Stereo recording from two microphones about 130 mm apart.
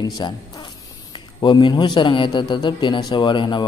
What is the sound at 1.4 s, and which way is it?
A man's voice, 35° left (ahead or behind).